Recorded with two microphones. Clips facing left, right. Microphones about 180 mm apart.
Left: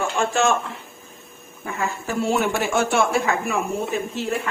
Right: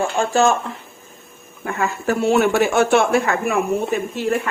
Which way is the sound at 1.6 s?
65° right (ahead or behind).